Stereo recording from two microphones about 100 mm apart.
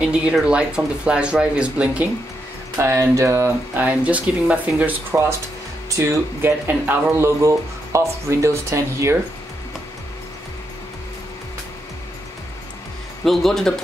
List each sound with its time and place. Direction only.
0.0 s speech: 10° right (ahead or behind)
2.8 s speech: 30° right (ahead or behind)
3.8 s speech: 15° right (ahead or behind)
5.9 s speech: 30° right (ahead or behind)
13.2 s a man's voice: centre (ahead or behind)